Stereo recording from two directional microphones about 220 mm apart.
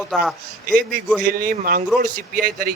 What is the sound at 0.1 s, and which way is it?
Speech, centre (ahead or behind).